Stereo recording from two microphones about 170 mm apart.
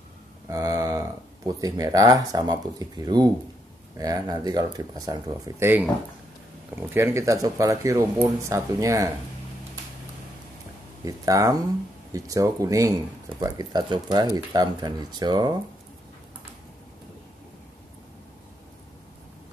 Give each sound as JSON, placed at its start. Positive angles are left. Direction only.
{"t": 0.5, "sound": "speech", "side_deg": -20}
{"t": 11.1, "sound": "speech", "side_deg": -20}